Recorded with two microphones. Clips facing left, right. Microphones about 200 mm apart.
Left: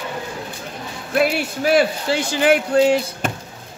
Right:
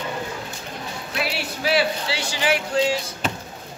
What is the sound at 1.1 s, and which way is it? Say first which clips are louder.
A man's voice: left 10 dB; 50° left (ahead or behind).